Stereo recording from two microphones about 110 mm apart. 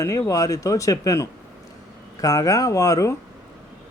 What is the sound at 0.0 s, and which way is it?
Speech, 30° left (ahead or behind).